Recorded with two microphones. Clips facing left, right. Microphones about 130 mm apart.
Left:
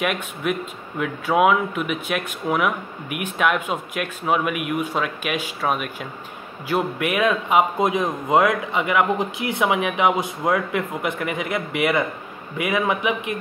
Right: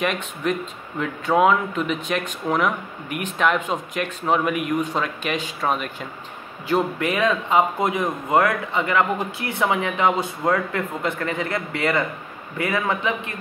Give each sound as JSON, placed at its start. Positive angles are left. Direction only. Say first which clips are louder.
{"t": 0.0, "sound": "a man's voice", "louder": "even", "side_deg": 5}